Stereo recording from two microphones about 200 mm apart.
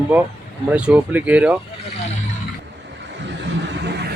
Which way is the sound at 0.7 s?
5° right (ahead or behind).